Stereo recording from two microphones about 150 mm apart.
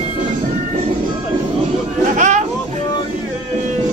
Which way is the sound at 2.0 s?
55° right (ahead or behind).